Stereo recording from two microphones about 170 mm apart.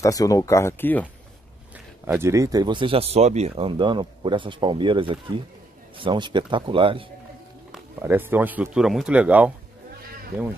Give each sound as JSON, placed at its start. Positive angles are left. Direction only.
{"t": 0.0, "sound": "speech", "side_deg": 20}
{"t": 2.1, "sound": "speech", "side_deg": -15}
{"t": 8.0, "sound": "speech", "side_deg": -10}